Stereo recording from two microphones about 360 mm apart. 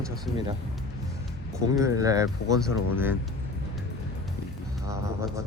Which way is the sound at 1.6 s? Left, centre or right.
Centre.